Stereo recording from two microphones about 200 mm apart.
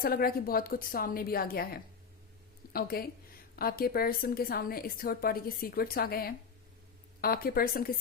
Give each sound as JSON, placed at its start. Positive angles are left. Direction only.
{"t": 0.0, "sound": "a woman's voice", "side_deg": 50}